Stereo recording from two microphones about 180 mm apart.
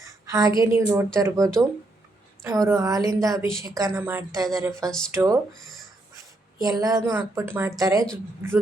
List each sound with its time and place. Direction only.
0.0 s a sound: 20° right (ahead or behind)
0.8 s a woman's voice: 15° right (ahead or behind)
4.9 s speech: 5° left (ahead or behind)
5.1 s a woman's voice: 20° right (ahead or behind)
6.6 s a woman's voice: 20° right (ahead or behind)